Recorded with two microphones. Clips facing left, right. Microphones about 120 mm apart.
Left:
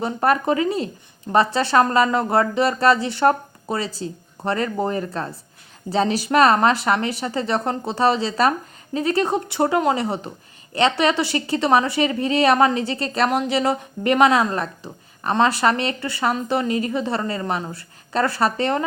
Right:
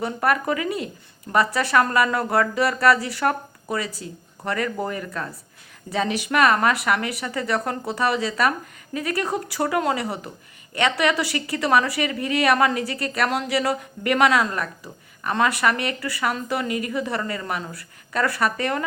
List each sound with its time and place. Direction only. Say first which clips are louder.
0.0 s speech: left 3 dB; 25° left (ahead or behind)